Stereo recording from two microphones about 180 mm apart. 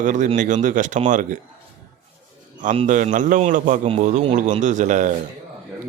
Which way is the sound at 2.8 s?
45° right (ahead or behind).